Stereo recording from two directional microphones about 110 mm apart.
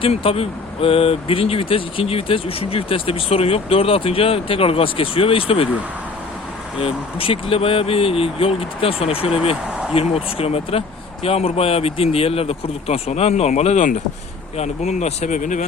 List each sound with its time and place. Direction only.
0.0 s speech: 55° left (ahead or behind)
6.8 s speech: 55° left (ahead or behind); by 15.3 s 90° left